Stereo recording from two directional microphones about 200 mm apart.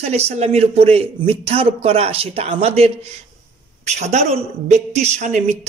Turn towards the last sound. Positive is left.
turn(degrees=-35)  # may be behind; listen again after turning